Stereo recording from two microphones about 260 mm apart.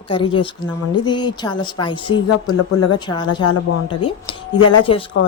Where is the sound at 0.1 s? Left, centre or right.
Centre.